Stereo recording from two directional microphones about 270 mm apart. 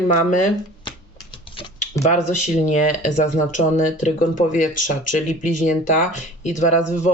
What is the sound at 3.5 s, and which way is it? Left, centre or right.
Speech, left.